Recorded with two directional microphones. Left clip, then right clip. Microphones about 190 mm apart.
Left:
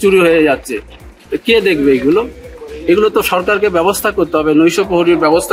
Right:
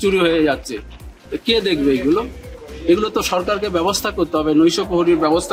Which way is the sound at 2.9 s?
20° right (ahead or behind).